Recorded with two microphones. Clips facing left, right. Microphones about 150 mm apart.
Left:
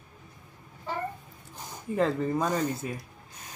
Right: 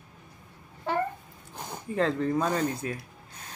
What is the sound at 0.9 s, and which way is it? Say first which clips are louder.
Babbling: right 6 dB; 65° right (ahead or behind).